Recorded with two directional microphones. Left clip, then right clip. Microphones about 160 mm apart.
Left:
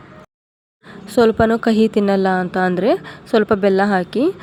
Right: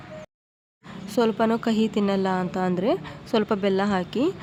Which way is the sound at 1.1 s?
25° left (ahead or behind).